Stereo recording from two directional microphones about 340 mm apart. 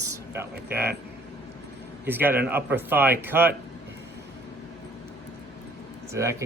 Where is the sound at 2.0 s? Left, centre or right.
Centre.